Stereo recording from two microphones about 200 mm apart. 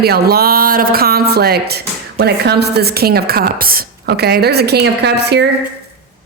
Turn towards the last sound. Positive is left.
turn(degrees=-55)  # may be behind; listen again after turning